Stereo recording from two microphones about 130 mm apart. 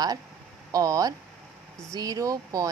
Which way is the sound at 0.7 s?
25° right (ahead or behind).